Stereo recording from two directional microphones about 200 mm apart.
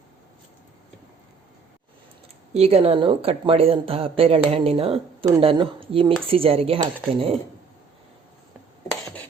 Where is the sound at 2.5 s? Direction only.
30° right (ahead or behind).